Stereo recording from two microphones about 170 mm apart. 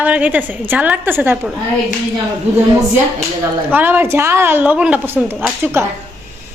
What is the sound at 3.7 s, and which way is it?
A woman's voice, 10° right (ahead or behind).